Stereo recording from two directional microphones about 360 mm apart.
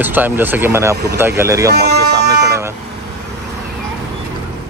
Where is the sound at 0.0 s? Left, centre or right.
Centre.